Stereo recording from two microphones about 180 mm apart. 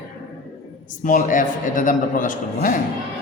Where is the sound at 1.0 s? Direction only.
45° left (ahead or behind).